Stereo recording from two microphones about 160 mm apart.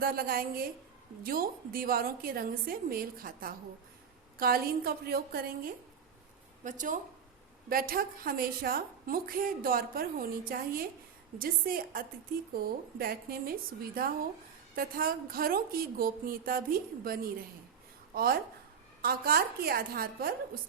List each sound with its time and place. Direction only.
0.0 s a woman's voice: 65° right (ahead or behind)
6.7 s speech: 55° right (ahead or behind)
7.7 s a woman's voice: 65° right (ahead or behind)